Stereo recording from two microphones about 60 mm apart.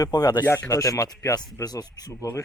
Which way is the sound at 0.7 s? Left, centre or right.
Left.